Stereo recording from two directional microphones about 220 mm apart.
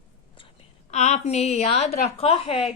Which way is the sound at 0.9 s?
30° left (ahead or behind).